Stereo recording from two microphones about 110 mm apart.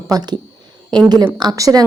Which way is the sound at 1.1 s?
40° right (ahead or behind).